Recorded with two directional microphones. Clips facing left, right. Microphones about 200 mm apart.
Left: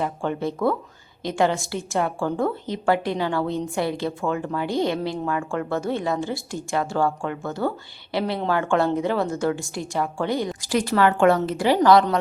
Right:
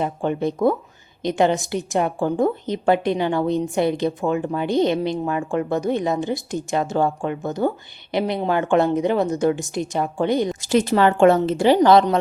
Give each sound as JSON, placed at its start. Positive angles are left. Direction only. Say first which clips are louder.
{"t": 0.0, "sound": "a woman's voice", "louder": "right 3 dB", "side_deg": -20}